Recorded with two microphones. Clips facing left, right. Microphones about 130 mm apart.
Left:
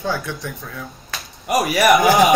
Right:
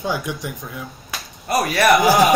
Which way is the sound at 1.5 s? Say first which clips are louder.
Left 1 dB; 10° left (ahead or behind).